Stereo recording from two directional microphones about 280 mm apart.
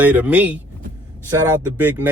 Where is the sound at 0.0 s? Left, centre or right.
Centre.